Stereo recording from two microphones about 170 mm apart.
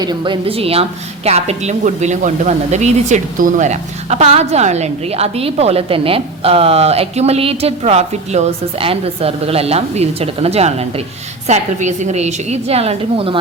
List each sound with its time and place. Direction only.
0.0 s a woman's voice: 25° right (ahead or behind)